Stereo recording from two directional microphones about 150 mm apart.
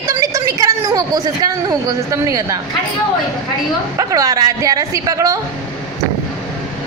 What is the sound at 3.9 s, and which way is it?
A woman's voice, 25° right (ahead or behind).